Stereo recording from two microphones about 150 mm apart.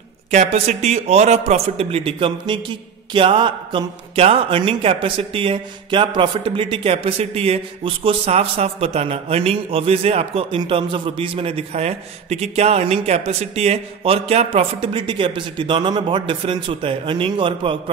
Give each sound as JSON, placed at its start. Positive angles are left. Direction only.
{"t": 0.3, "sound": "a man's voice", "side_deg": -50}